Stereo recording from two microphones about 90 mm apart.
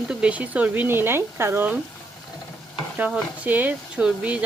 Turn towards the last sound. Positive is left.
turn(degrees=-15)  # may be behind; listen again after turning